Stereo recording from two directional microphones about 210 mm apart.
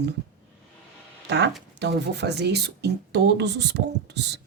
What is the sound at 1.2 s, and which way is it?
Speech, 55° right (ahead or behind).